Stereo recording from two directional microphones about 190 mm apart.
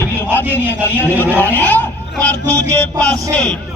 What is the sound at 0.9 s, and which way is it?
A man's voice, 10° left (ahead or behind).